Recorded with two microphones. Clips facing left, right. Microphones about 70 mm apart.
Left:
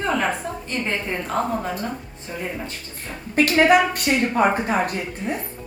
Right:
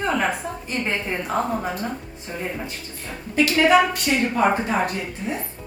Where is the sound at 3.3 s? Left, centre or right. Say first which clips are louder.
Left 2 dB; left.